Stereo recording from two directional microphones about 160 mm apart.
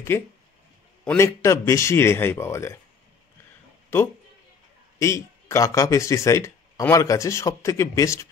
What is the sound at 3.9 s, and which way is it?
Speech, 15° left (ahead or behind).